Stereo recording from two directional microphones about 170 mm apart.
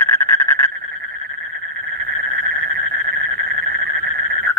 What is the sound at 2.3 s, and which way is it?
Frog, 60° right (ahead or behind).